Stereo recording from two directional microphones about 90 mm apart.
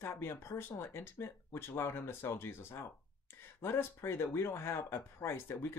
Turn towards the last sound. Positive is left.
turn(degrees=30)  # may be behind; listen again after turning